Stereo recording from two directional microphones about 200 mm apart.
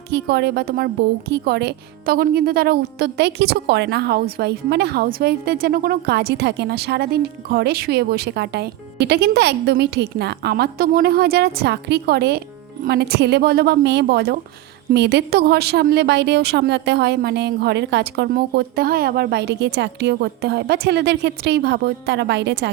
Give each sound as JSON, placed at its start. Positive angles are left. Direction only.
{"t": 0.1, "sound": "a woman's voice", "side_deg": -55}